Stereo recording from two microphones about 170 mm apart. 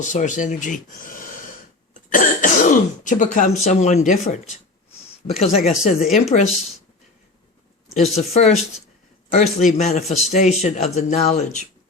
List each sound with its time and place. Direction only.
0.0 s a man's voice: 45° left (ahead or behind)
7.9 s a man's voice: 40° left (ahead or behind)